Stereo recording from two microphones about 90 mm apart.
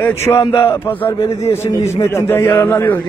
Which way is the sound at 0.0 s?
25° left (ahead or behind).